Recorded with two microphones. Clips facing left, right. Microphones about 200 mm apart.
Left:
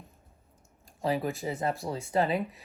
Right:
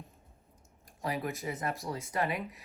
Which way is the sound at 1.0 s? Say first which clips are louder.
Left 5 dB; 30° left (ahead or behind).